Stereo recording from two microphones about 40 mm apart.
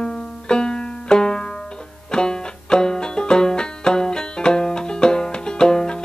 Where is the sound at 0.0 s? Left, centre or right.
Left.